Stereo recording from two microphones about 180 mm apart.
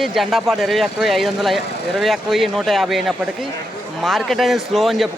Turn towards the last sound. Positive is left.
turn(degrees=0)  # may be behind; listen again after turning